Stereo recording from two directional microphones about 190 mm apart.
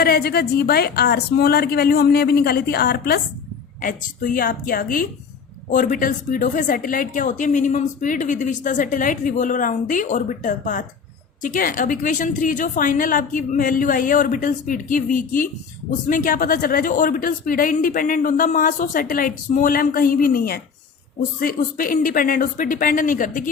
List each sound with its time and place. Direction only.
0.0 s a woman's voice: 55° left (ahead or behind)